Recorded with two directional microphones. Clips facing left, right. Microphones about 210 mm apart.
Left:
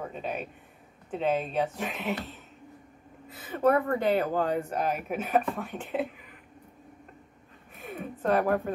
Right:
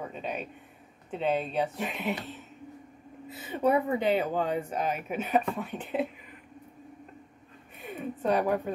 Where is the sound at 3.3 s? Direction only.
20° right (ahead or behind).